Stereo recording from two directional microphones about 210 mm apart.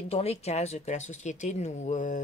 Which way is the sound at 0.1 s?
30° left (ahead or behind).